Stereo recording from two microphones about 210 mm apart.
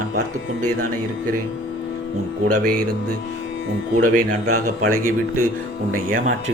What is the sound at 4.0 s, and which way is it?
Speech, 90° right.